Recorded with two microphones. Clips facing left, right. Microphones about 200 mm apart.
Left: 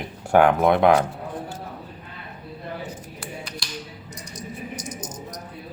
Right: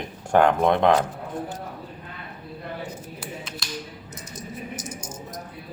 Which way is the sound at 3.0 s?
5° right (ahead or behind).